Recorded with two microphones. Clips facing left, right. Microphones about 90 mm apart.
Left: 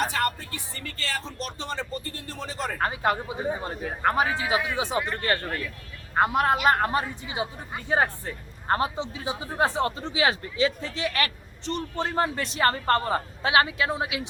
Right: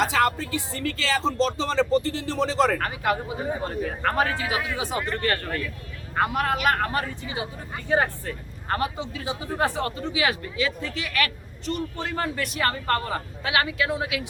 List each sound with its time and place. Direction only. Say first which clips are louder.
0.0 s speech: right 4 dB; 90° right
2.7 s speech: even; 25° left (ahead or behind)